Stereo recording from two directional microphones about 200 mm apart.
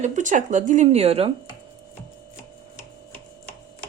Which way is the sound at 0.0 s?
40° right (ahead or behind).